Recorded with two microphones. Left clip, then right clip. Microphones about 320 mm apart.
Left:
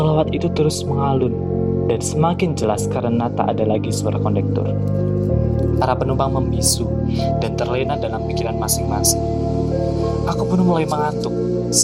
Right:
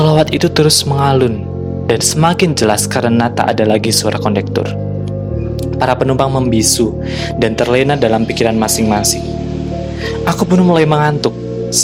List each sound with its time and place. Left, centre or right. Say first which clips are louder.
0.0 s speech: right 7 dB; right
5.8 s speech: right 7 dB; right
10.2 s speech: right 9 dB; right